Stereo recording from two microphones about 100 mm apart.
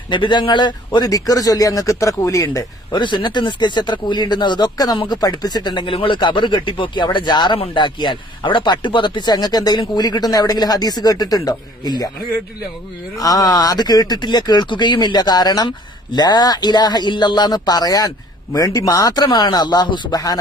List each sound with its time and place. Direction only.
0.1 s speech: 50° left (ahead or behind); by 2.6 s 35° left (ahead or behind)
2.9 s speech: 50° left (ahead or behind)
7.5 s speech: 60° left (ahead or behind); by 12.1 s 40° left (ahead or behind)
13.2 s speech: 35° left (ahead or behind)